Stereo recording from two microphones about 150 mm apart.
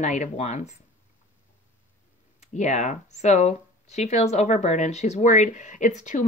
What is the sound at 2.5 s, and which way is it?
Speech, 55° left (ahead or behind).